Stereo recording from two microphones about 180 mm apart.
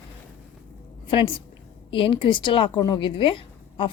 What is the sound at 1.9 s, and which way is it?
A woman's voice, 30° left (ahead or behind).